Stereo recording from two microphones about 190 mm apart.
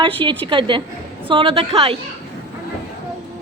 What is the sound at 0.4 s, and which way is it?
A woman's voice, 25° right (ahead or behind).